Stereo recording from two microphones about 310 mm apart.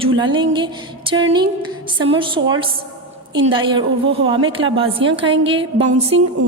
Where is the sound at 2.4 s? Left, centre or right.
Right.